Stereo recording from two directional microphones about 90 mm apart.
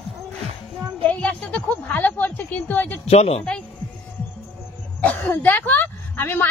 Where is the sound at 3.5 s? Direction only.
10° left (ahead or behind).